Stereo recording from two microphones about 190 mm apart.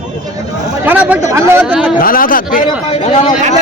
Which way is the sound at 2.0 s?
50° left (ahead or behind).